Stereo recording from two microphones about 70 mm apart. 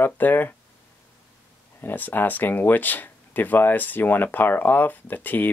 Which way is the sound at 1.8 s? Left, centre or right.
Left.